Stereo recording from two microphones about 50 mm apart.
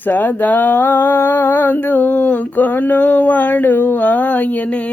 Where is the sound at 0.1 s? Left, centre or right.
Left.